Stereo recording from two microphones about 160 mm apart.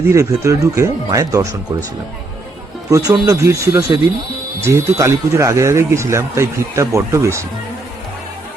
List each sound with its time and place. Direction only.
0.1 s speech: 20° right (ahead or behind)
3.1 s speech: 15° right (ahead or behind)